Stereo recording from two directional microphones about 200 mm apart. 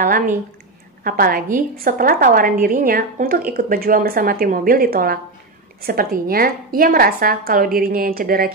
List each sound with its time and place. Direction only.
0.0 s a woman's voice: 45° right (ahead or behind)